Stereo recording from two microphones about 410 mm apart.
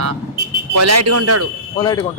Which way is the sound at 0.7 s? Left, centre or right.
Right.